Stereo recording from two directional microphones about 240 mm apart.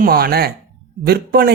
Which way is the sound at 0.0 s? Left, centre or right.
Right.